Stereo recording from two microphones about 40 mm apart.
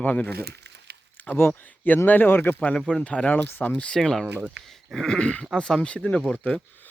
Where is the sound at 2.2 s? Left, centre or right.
Left.